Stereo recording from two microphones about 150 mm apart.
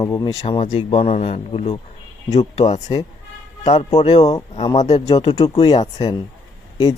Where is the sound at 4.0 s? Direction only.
45° left (ahead or behind).